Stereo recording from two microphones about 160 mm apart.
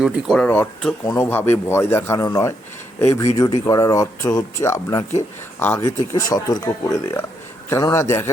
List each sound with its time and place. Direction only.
0.0 s speech: centre (ahead or behind)
0.4 s speech: 10° left (ahead or behind)